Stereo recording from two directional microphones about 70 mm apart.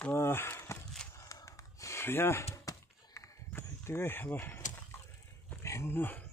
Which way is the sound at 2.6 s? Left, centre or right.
Left.